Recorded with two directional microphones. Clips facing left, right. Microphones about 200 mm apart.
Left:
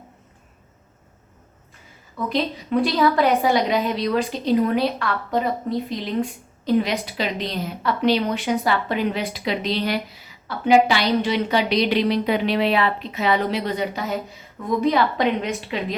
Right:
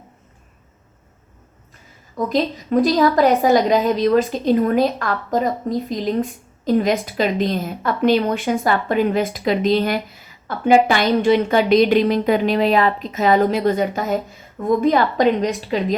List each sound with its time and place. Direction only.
2.1 s a woman's voice: 45° right (ahead or behind)